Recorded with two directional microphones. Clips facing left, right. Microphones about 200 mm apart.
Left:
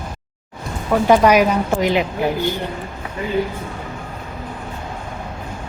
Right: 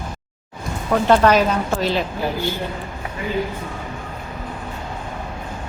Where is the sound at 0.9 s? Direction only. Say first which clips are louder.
Left 2 dB; 10° left (ahead or behind).